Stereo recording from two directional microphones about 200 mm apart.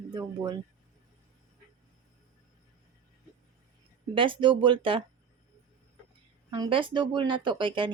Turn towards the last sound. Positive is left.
turn(degrees=-25)  # may be behind; listen again after turning